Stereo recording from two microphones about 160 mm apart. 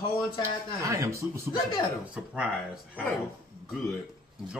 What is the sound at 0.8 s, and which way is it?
Speech, 20° right (ahead or behind).